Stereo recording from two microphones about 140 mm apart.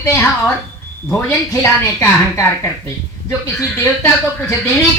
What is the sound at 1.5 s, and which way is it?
A woman's voice, 20° left (ahead or behind).